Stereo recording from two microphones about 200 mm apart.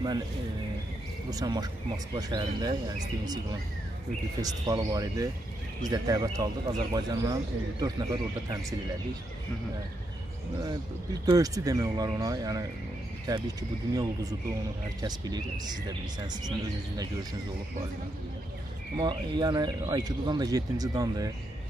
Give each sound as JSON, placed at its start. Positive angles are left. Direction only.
{"t": 1.3, "sound": "speech", "side_deg": -20}
{"t": 4.4, "sound": "speech", "side_deg": -20}
{"t": 11.2, "sound": "speech", "side_deg": -20}
{"t": 18.9, "sound": "speech", "side_deg": -20}